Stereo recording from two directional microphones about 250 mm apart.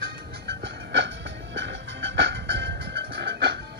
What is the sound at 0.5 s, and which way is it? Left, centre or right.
Music, right.